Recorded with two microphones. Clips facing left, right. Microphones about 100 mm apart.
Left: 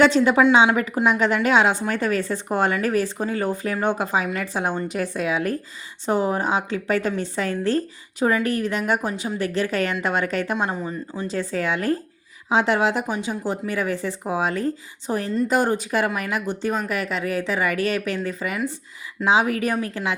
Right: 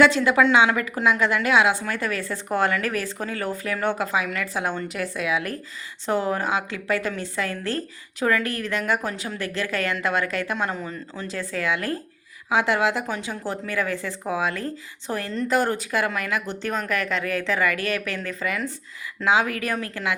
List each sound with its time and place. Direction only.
0.0 s a woman's voice: 20° left (ahead or behind)
6.1 s a woman's voice: 20° left (ahead or behind)